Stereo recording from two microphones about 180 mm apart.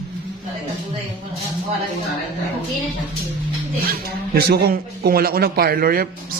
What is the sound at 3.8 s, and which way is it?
Speech, 60° right (ahead or behind).